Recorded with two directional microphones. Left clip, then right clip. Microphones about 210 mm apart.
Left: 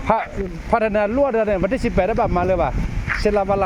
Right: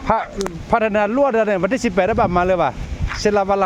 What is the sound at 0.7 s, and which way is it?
A man's voice, 10° right (ahead or behind).